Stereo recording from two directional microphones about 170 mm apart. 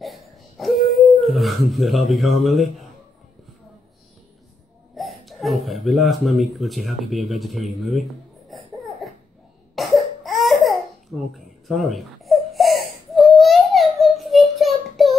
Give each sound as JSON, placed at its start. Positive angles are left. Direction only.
{"t": 0.0, "sound": "a sound", "side_deg": 0}
{"t": 1.0, "sound": "speech", "side_deg": 0}
{"t": 4.9, "sound": "speech", "side_deg": 0}
{"t": 8.5, "sound": "laughter", "side_deg": 0}
{"t": 9.8, "sound": "cough", "side_deg": 0}